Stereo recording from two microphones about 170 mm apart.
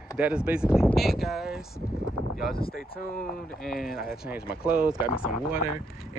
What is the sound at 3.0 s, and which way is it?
Speech, 55° left (ahead or behind).